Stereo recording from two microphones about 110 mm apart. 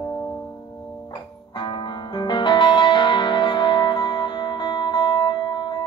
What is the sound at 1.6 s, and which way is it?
Music, 45° left (ahead or behind).